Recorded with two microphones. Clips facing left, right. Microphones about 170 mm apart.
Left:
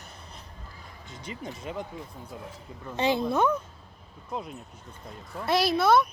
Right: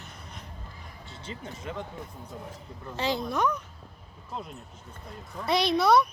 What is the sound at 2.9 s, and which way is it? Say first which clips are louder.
Speech: left 4 dB; 20° left (ahead or behind).